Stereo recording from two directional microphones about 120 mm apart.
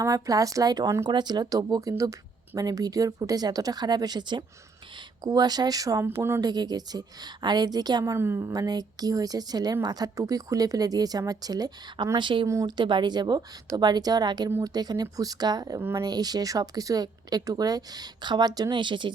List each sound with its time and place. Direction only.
0.0 s a woman's voice: 30° right (ahead or behind)
8.1 s a woman's voice: 20° right (ahead or behind); by 19.1 s 40° right (ahead or behind)